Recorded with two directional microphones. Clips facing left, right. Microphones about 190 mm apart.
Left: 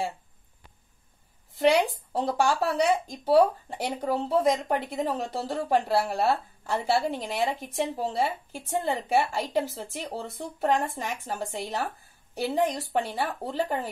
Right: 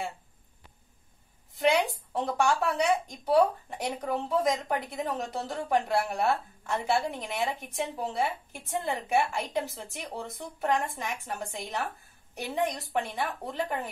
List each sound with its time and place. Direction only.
2.1 s speech: 35° left (ahead or behind)